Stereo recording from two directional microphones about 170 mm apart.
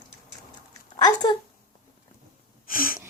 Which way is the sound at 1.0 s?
25° left (ahead or behind).